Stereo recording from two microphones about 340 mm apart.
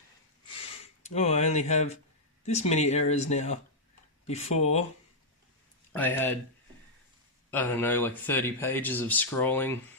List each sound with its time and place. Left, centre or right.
1.0 s speech: centre
5.9 s speech: centre
7.5 s speech: centre